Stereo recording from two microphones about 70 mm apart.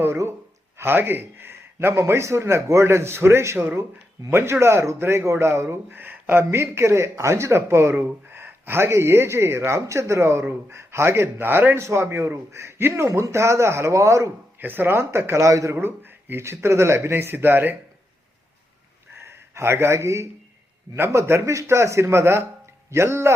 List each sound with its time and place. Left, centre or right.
0.8 s speech: right
11.8 s speech: right
14.6 s speech: right
15.8 s speech: right
19.2 s speech: right